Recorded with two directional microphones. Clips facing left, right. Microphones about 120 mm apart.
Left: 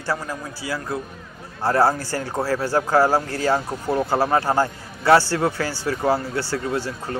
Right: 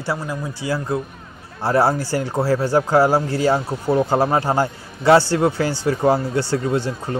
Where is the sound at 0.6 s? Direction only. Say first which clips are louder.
Right 5 dB; 25° right (ahead or behind).